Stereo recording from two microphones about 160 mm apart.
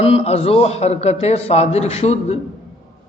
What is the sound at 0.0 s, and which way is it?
A man's voice, 40° left (ahead or behind).